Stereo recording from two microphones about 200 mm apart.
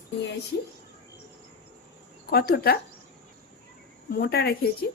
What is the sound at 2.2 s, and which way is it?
Speech, 50° left (ahead or behind).